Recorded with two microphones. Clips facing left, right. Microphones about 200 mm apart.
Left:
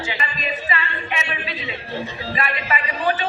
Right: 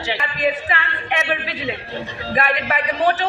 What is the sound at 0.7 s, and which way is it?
A man's voice, 65° right (ahead or behind).